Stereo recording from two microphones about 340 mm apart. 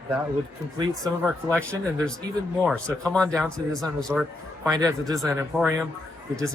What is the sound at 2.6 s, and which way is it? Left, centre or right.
Speech, centre.